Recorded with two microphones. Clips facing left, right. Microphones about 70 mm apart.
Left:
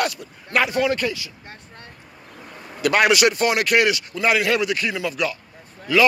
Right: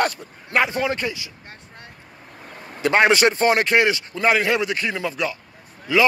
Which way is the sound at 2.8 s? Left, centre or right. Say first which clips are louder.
Right 1 dB; right.